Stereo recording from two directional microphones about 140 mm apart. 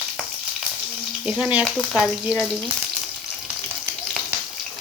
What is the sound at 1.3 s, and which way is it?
Speech, 5° right (ahead or behind).